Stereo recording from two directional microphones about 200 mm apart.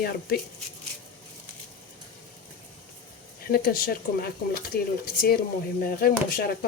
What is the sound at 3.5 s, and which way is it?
Speech, 50° left (ahead or behind).